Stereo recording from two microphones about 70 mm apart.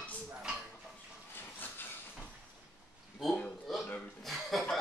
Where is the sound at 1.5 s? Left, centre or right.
Left.